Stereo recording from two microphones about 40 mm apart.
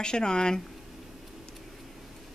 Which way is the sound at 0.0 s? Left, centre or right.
Left.